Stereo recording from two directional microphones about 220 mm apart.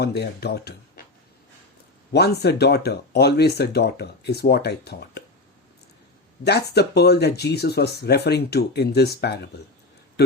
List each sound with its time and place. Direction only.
0.0 s speech: 50° left (ahead or behind)
2.1 s speech: 50° left (ahead or behind)
6.4 s speech: 50° left (ahead or behind)